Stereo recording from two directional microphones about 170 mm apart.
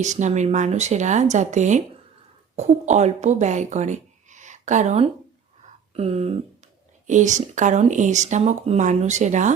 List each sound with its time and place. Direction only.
0.0 s speech: 45° right (ahead or behind)